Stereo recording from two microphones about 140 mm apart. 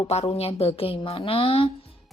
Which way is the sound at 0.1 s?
45° left (ahead or behind).